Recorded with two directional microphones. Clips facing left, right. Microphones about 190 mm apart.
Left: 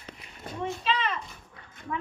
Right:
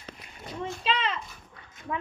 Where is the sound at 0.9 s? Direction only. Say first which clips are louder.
Right 1 dB; 30° right (ahead or behind).